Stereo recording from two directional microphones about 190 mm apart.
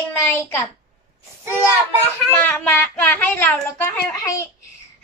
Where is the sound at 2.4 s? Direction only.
10° left (ahead or behind).